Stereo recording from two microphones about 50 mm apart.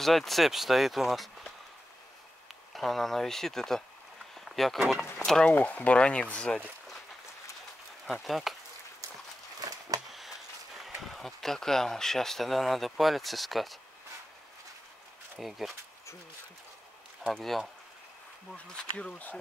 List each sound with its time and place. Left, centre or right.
0.0 s speech: centre
2.7 s speech: centre
4.7 s speech: centre
5.2 s speech: centre
5.6 s speech: left
8.1 s speech: centre
11.0 s speech: centre
15.3 s speech: centre
17.3 s speech: centre
18.5 s speech: centre